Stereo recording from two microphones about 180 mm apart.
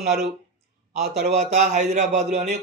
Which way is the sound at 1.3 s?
40° right (ahead or behind).